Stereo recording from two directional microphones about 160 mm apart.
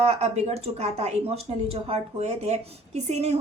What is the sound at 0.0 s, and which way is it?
Speech, 40° right (ahead or behind).